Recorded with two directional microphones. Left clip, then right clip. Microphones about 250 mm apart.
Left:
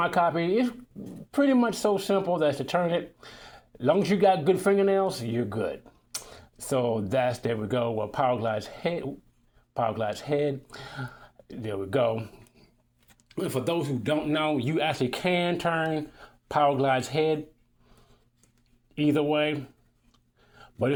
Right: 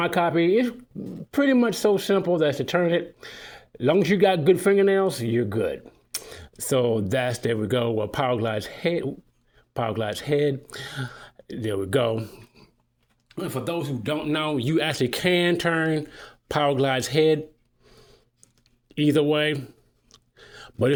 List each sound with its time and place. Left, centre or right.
0.0 s speech: right
13.2 s speech: centre
14.3 s speech: right
15.3 s speech: right
15.5 s speech: right
18.9 s a sound: right